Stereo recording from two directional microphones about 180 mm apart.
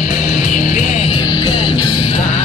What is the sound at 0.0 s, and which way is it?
Music, 40° left (ahead or behind).